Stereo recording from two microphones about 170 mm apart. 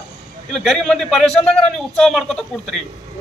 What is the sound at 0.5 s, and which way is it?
A man's voice, 5° left (ahead or behind).